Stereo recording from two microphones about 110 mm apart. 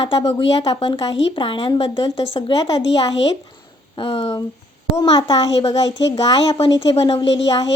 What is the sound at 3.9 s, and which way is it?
Speech, 55° left (ahead or behind).